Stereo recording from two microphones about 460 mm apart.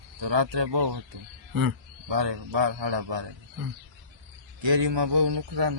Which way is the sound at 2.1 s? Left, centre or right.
Right.